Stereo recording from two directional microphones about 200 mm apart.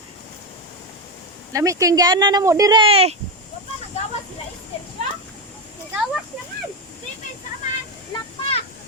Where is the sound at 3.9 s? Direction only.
30° left (ahead or behind).